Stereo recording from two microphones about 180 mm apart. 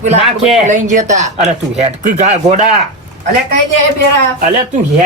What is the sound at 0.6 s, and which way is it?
Speech, 40° right (ahead or behind).